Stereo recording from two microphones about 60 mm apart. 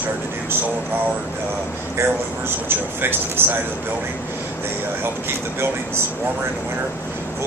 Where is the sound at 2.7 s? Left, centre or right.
Right.